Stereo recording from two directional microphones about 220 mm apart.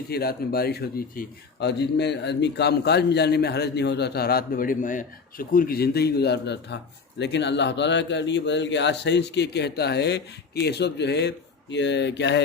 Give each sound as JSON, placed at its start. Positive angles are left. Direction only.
{"t": 0.1, "sound": "speech", "side_deg": 45}